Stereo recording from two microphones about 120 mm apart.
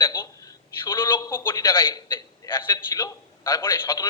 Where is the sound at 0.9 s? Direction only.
25° left (ahead or behind).